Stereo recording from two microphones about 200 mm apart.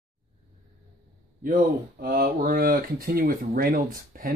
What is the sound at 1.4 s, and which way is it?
Speech, 45° right (ahead or behind).